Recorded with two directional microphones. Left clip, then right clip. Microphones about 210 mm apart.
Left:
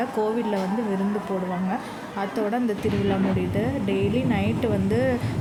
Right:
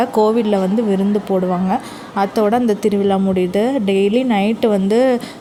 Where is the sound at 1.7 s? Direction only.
35° right (ahead or behind).